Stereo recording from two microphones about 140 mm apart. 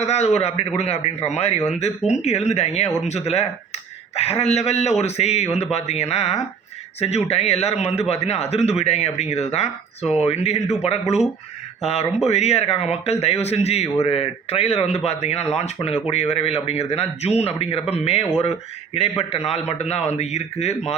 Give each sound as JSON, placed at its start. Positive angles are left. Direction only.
{"t": 0.0, "sound": "speech", "side_deg": 50}
{"t": 7.3, "sound": "speech", "side_deg": 45}